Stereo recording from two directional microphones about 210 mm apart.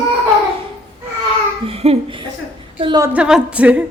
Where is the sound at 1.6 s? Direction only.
30° right (ahead or behind).